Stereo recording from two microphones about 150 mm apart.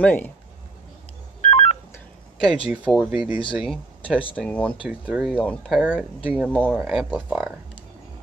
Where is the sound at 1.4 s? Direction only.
45° left (ahead or behind).